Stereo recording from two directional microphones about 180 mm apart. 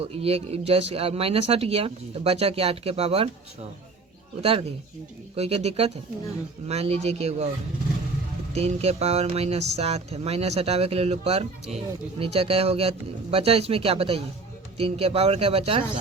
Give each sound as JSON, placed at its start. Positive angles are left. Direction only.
{"t": 0.0, "sound": "speech", "side_deg": -35}
{"t": 4.4, "sound": "speech", "side_deg": -35}
{"t": 8.5, "sound": "speech", "side_deg": -35}